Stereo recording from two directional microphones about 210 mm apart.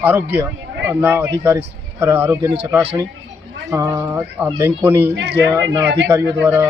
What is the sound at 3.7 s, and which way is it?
Speech, 15° right (ahead or behind).